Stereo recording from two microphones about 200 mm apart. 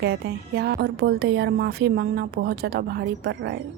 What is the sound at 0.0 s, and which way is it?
A woman's voice, 55° right (ahead or behind).